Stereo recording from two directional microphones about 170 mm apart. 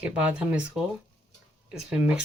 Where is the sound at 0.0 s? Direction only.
5° right (ahead or behind).